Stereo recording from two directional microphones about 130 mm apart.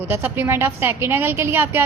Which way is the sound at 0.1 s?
15° right (ahead or behind).